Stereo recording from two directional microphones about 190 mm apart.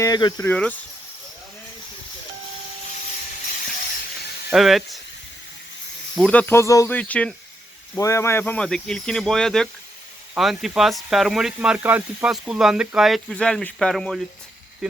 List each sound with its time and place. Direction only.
0.0 s speech: 20° left (ahead or behind)
0.4 s speech: 10° left (ahead or behind)
4.5 s speech: centre (ahead or behind)
6.1 s speech: 5° left (ahead or behind)